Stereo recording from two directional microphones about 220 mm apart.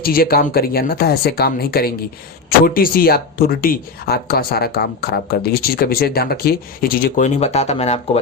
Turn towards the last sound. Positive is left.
turn(degrees=30)  # may be behind; listen again after turning